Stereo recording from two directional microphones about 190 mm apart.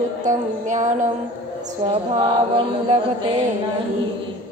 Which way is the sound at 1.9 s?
30° right (ahead or behind).